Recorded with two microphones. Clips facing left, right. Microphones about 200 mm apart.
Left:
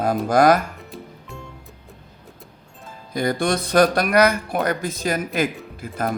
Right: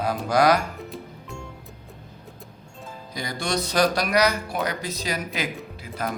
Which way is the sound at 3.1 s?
55° left (ahead or behind).